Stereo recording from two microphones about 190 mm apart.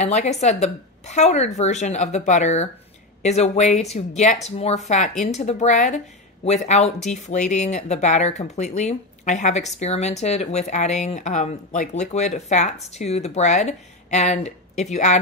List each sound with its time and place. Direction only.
0.0 s speech: 35° left (ahead or behind)